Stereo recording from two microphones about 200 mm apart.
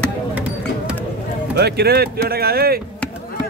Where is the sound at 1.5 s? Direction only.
55° right (ahead or behind).